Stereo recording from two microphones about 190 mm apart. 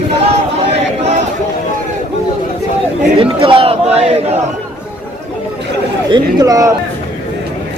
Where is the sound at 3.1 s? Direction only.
30° right (ahead or behind).